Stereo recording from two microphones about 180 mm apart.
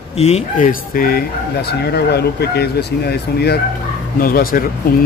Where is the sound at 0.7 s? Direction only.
55° left (ahead or behind).